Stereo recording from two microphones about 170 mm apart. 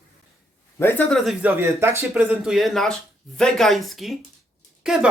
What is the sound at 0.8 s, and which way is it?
Speech, 15° left (ahead or behind).